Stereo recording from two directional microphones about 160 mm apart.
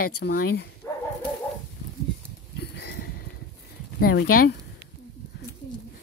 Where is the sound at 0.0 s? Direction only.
80° left.